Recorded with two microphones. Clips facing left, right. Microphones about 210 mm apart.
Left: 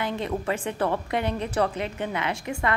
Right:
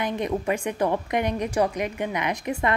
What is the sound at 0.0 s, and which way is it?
A woman's voice, 15° right (ahead or behind).